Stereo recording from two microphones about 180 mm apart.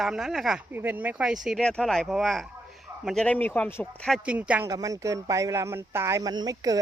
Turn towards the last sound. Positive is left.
turn(degrees=-20)  # may be behind; listen again after turning